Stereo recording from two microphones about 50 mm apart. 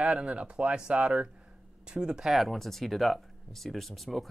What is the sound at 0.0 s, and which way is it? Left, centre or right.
Speech, centre.